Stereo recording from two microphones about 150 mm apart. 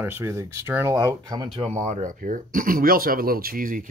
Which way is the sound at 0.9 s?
25° right (ahead or behind).